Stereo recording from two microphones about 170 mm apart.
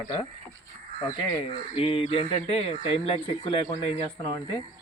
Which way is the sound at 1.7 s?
35° left (ahead or behind).